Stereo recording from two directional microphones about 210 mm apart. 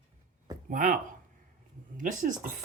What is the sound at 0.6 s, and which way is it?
Speech, 40° right (ahead or behind).